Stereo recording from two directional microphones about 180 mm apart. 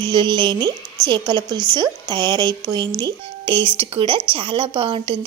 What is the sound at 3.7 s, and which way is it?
A woman's voice, 30° right (ahead or behind).